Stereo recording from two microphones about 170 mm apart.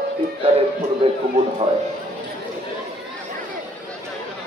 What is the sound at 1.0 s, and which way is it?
Speech, 35° right (ahead or behind).